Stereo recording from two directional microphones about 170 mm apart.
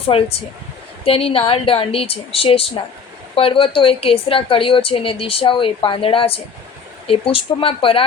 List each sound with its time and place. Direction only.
0.1 s a woman's voice: 35° left (ahead or behind)